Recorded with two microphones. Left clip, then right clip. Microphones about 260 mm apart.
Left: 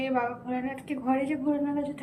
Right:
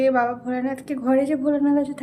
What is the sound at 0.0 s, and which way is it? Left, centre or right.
A woman's voice, centre.